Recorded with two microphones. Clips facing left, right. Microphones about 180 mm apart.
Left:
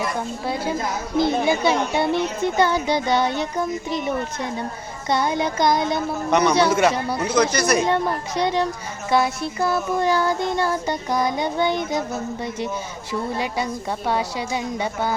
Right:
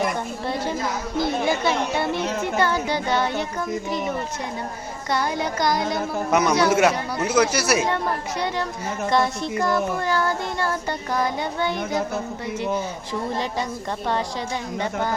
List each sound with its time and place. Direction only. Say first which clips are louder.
0.4 s child singing: left 1 dB; 5° left (ahead or behind)
5.1 s child singing: left 3 dB; 20° left (ahead or behind)
6.3 s speech: left 1 dB; 5° right (ahead or behind)
8.4 s child singing: left 7 dB; 20° left (ahead or behind)
9.0 s child singing: left 2 dB; 5° left (ahead or behind)
10.0 s child singing: left 3 dB; 15° left (ahead or behind)
13.3 s child singing: left 1 dB; 10° left (ahead or behind)